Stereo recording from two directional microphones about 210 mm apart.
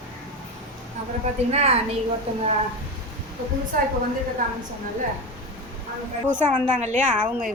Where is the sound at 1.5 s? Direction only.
30° right (ahead or behind).